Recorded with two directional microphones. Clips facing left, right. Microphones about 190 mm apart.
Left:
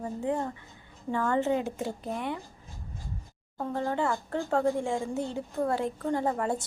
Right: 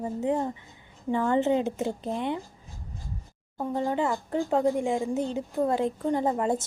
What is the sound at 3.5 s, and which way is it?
Speech, 15° right (ahead or behind).